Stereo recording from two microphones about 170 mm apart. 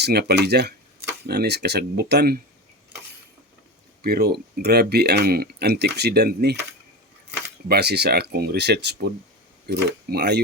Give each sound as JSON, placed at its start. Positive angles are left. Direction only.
{"t": 0.0, "sound": "speech", "side_deg": -70}
{"t": 4.0, "sound": "speech", "side_deg": -65}
{"t": 7.7, "sound": "speech", "side_deg": -75}